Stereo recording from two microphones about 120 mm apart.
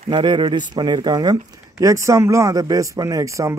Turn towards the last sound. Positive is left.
turn(degrees=-25)  # may be behind; listen again after turning